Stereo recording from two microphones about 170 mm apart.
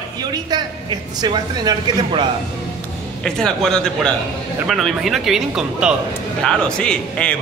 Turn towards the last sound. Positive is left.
turn(degrees=5)  # may be behind; listen again after turning